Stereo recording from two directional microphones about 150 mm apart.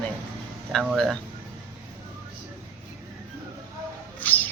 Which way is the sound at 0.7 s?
5° left (ahead or behind).